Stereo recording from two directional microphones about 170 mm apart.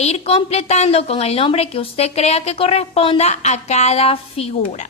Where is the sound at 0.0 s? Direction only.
35° left (ahead or behind).